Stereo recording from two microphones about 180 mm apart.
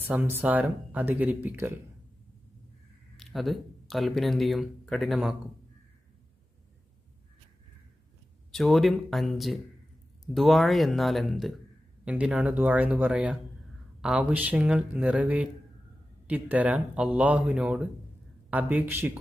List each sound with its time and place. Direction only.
0.0 s speech: 10° right (ahead or behind)
3.2 s speech: centre (ahead or behind)
8.5 s speech: centre (ahead or behind)